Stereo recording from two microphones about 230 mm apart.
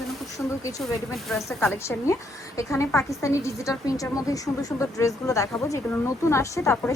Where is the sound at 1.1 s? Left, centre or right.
Centre.